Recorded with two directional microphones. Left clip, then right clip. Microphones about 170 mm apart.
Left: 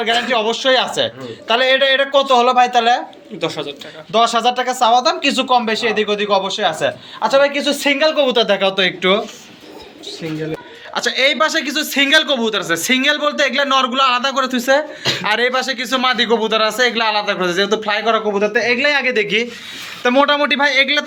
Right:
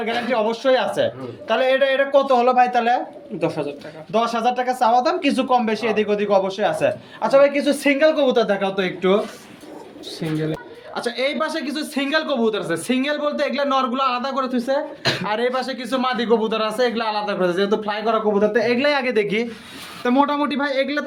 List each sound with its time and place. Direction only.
0.0 s speech: centre (ahead or behind)
3.4 s speech: 35° right (ahead or behind)
4.1 s speech: centre (ahead or behind)
10.9 s speech: centre (ahead or behind)
14.5 s speech: 15° left (ahead or behind)
15.2 s speech: centre (ahead or behind)
18.3 s speech: 15° right (ahead or behind)
18.6 s speech: 25° right (ahead or behind)
20.0 s speech: 5° left (ahead or behind)